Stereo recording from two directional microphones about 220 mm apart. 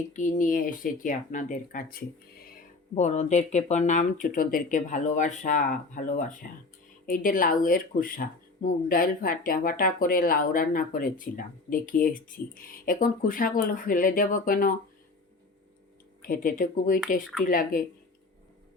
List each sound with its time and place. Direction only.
0.1 s speech: 35° left (ahead or behind)
16.2 s speech: 40° left (ahead or behind)